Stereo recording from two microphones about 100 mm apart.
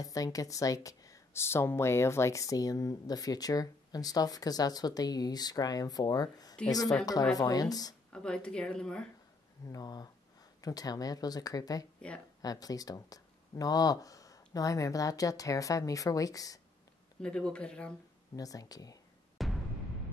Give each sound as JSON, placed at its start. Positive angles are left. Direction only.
{"t": 0.0, "sound": "a woman's voice", "side_deg": 35}
{"t": 8.1, "sound": "a woman's voice", "side_deg": 10}
{"t": 9.7, "sound": "a woman's voice", "side_deg": 40}
{"t": 17.2, "sound": "a woman's voice", "side_deg": 10}
{"t": 18.3, "sound": "a woman's voice", "side_deg": 35}
{"t": 19.3, "sound": "music", "side_deg": 0}